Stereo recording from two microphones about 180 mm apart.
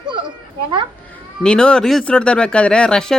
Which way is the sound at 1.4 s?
5° left (ahead or behind).